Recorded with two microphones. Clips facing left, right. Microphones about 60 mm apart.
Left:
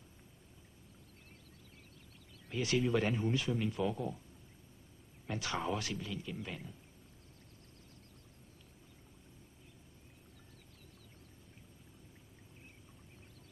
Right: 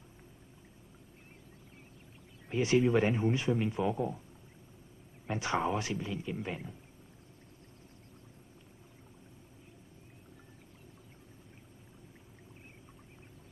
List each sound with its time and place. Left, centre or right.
2.5 s speech: right
5.2 s speech: right